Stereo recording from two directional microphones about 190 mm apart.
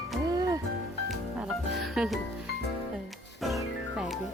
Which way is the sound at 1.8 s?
Centre (ahead or behind).